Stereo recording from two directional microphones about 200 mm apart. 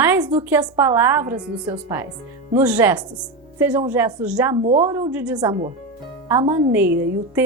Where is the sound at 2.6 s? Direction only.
5° right (ahead or behind).